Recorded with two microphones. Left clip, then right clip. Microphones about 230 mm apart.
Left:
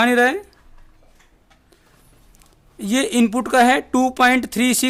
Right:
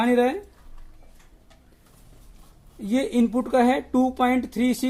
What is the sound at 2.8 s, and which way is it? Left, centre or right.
Speech, left.